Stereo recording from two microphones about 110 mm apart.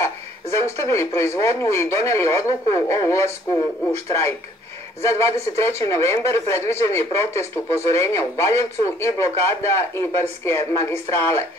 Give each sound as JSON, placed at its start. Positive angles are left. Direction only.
{"t": 0.0, "sound": "speech", "side_deg": 25}
{"t": 5.0, "sound": "speech", "side_deg": 25}